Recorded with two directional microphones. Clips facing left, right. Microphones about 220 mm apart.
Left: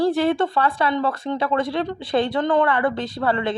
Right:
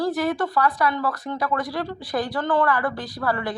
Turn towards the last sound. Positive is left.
turn(degrees=25)  # may be behind; listen again after turning